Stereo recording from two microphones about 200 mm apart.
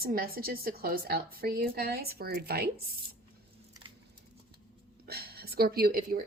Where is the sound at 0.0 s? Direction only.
50° right (ahead or behind).